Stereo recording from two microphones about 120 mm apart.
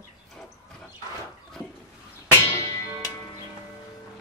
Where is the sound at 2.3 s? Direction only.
20° left (ahead or behind).